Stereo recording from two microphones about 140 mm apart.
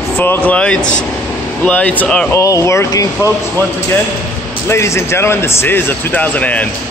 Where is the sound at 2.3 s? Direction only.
20° left (ahead or behind).